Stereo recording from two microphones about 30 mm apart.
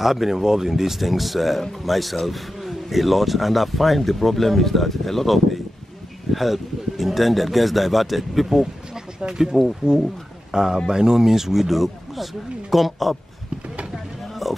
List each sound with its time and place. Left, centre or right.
0.0 s speech: centre
9.3 s speech: right; by 13.2 s centre
14.4 s music: centre